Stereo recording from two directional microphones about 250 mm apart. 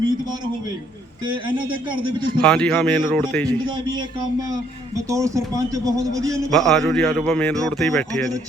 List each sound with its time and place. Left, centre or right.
1.2 s speech: centre
2.4 s a man's voice: centre
3.7 s speech: centre
6.5 s a man's voice: centre